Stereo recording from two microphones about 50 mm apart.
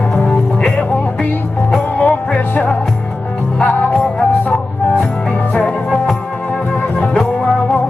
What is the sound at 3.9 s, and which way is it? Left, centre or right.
Music, centre.